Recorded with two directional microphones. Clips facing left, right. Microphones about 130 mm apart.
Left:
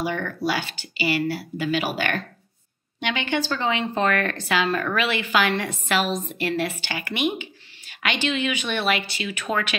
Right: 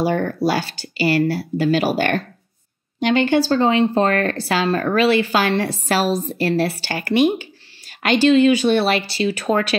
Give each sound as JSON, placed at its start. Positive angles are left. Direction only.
{"t": 0.0, "sound": "speech", "side_deg": -40}